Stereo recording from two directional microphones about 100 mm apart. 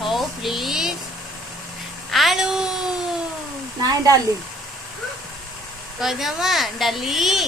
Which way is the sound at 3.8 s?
35° right (ahead or behind).